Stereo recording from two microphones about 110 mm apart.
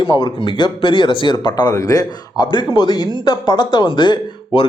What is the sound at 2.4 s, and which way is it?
A man's voice, 45° left (ahead or behind).